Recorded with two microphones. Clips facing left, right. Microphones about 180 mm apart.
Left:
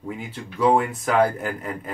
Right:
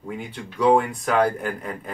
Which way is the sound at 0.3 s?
5° left (ahead or behind).